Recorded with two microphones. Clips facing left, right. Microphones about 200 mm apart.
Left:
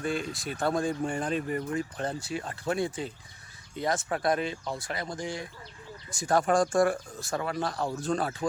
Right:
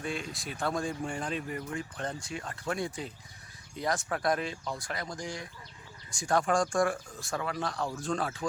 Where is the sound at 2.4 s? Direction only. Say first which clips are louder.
Left 2 dB; 30° left (ahead or behind).